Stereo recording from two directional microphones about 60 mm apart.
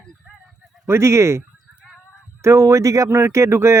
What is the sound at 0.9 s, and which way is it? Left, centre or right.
Speech, right.